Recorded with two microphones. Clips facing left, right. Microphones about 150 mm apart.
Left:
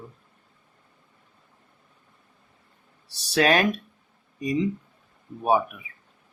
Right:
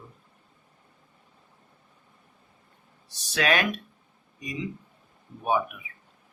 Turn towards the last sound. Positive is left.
turn(degrees=35)  # may be behind; listen again after turning